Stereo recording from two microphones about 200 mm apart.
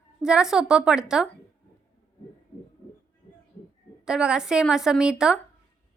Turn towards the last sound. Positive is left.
turn(degrees=-5)  # may be behind; listen again after turning